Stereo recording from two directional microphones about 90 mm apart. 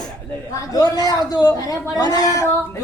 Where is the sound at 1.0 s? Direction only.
45° left (ahead or behind).